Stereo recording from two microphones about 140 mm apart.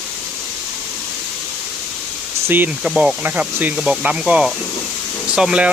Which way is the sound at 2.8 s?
5° right (ahead or behind).